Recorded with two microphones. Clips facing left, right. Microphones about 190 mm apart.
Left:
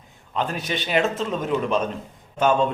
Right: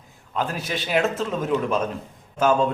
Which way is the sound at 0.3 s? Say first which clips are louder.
Left 1 dB; centre (ahead or behind).